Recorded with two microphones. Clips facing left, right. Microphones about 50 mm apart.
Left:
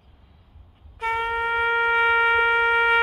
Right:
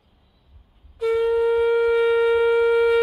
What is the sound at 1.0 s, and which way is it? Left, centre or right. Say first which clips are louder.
Shofar: right 5 dB; left.